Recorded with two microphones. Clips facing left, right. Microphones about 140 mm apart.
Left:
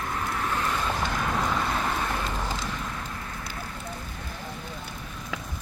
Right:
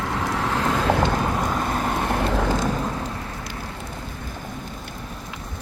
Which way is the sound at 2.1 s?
85° right.